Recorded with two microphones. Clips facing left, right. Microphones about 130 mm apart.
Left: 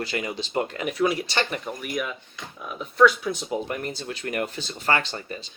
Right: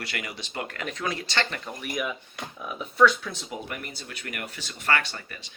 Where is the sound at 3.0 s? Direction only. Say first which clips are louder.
Left 3 dB; 15° left (ahead or behind).